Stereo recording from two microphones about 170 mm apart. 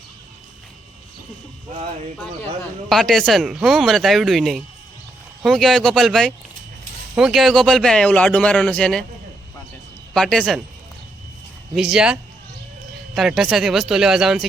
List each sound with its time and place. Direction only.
1.7 s speech: 40° right (ahead or behind)
2.9 s speech: centre (ahead or behind)
10.2 s speech: 5° left (ahead or behind)
11.7 s speech: 5° right (ahead or behind)